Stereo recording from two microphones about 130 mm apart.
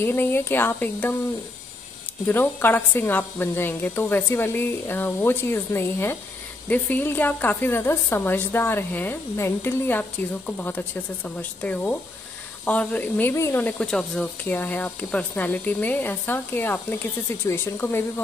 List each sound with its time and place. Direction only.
0.0 s a woman's voice: 15° left (ahead or behind)
2.2 s a woman's voice: 15° left (ahead or behind)